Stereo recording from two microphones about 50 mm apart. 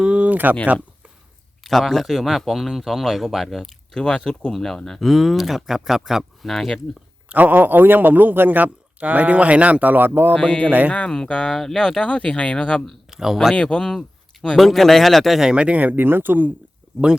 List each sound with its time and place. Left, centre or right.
0.0 s speech: right
1.6 s speech: centre
3.9 s speech: centre
7.3 s a man's voice: right
10.3 s speech: centre
10.7 s a man's voice: right
10.9 s speech: centre
12.0 s speech: left
13.1 s speech: centre
13.6 s speech: centre
14.6 s speech: centre
15.4 s a man's voice: centre; by 16.5 s right